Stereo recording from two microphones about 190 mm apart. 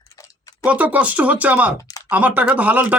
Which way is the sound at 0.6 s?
10° right (ahead or behind).